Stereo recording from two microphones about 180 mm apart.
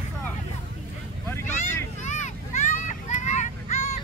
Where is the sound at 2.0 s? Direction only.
40° left (ahead or behind).